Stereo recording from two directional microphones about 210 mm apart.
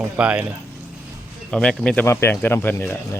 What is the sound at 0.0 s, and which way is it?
Speech, 5° right (ahead or behind).